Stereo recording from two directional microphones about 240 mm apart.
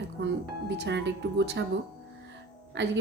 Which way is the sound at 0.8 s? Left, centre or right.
Right.